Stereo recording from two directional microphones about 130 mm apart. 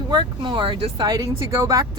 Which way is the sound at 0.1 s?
35° right (ahead or behind).